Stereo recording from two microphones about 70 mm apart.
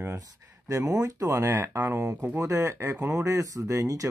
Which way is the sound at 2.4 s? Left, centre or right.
Right.